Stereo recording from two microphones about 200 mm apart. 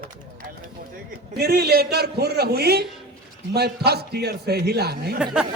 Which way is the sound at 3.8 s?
55° right (ahead or behind).